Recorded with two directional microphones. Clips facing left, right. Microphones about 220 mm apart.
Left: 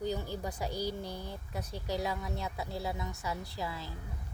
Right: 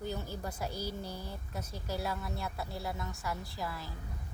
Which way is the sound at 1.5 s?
15° left (ahead or behind).